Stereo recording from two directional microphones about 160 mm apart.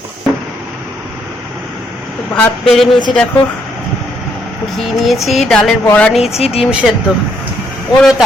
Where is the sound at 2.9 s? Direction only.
30° left (ahead or behind).